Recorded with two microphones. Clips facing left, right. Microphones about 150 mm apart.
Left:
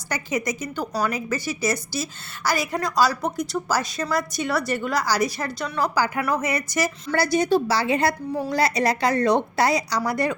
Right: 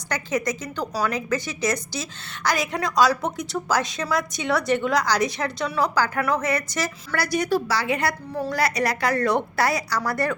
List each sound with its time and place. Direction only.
0.1 s a woman's voice: 10° left (ahead or behind)
7.1 s a woman's voice: 25° left (ahead or behind)
8.3 s a woman's voice: 15° left (ahead or behind)
8.5 s a woman's voice: 25° left (ahead or behind)